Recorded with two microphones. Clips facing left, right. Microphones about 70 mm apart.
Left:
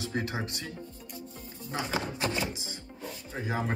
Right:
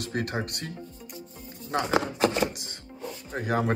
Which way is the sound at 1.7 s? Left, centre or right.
Right.